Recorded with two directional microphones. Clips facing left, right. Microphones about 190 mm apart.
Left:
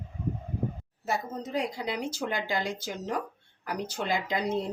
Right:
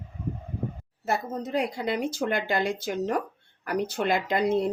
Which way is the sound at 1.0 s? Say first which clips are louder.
Right 3 dB; 60° right (ahead or behind).